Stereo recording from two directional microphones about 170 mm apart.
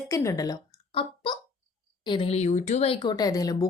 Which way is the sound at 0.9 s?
30° left (ahead or behind).